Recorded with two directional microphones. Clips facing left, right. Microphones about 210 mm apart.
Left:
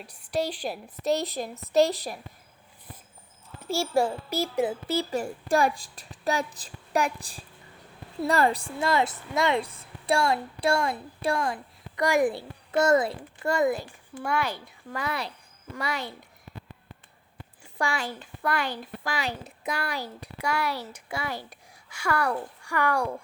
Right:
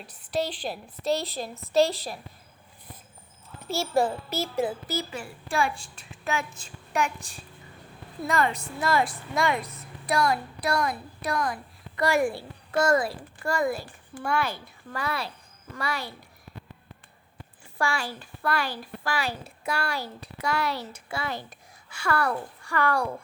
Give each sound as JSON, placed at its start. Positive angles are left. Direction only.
{"t": 0.0, "sound": "a woman's voice", "side_deg": 10}
{"t": 3.6, "sound": "a woman's voice", "side_deg": 10}
{"t": 4.9, "sound": "speech", "side_deg": 30}
{"t": 5.2, "sound": "a child's voice", "side_deg": 40}
{"t": 11.9, "sound": "a woman's voice", "side_deg": 15}
{"t": 17.7, "sound": "a woman's voice", "side_deg": 20}